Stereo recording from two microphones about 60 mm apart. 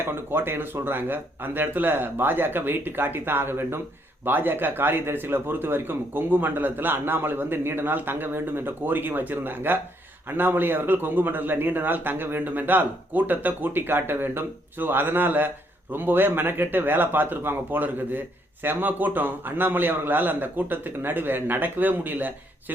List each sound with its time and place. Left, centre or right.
0.0 s a man's voice: right